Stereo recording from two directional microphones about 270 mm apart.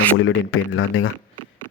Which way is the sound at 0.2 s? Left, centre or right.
Left.